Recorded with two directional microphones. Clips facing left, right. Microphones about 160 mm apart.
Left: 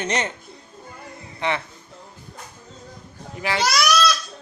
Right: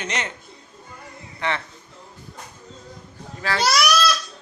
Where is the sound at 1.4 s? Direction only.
20° left (ahead or behind).